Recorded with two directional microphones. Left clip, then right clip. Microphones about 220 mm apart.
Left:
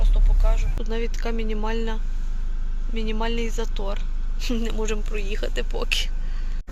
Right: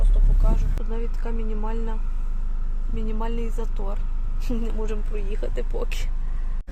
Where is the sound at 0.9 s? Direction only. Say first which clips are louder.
Left 6 dB; 5° left (ahead or behind).